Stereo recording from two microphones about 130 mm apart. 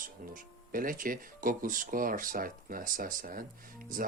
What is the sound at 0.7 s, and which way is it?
Speech, 90° right.